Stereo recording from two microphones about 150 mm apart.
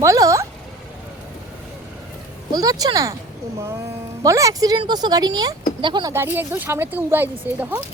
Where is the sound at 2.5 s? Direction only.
25° right (ahead or behind).